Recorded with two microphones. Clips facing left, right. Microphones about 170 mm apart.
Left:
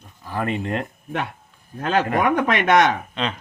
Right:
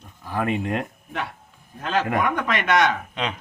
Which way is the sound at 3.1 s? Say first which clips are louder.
Left 2 dB; 15° right (ahead or behind).